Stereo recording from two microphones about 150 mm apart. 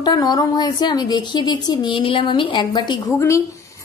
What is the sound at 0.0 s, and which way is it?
A woman's voice, 30° left (ahead or behind).